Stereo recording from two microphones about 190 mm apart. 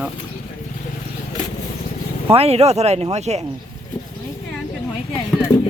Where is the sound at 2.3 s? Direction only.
30° right (ahead or behind).